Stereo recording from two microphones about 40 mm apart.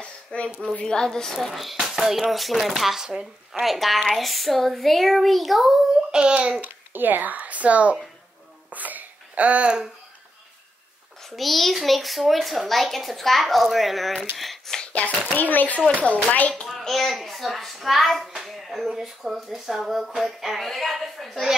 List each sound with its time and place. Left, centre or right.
0.0 s a sound: left
0.8 s speech: centre
1.8 s music: centre
2.3 s a child's voice: centre
3.6 s a child's voice: centre
6.1 s a child's voice: centre
6.6 s speech: right
8.7 s babbling: right
11.2 s a child's voice: centre
14.3 s a sound: centre
15.3 s a woman's voice: left
16.8 s a child's voice: centre